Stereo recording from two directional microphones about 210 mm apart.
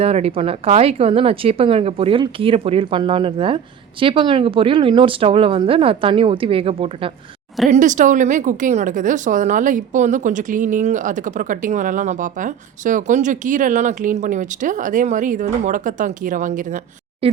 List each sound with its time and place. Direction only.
0.0 s speech: 30° right (ahead or behind)
7.7 s a woman's voice: 35° right (ahead or behind)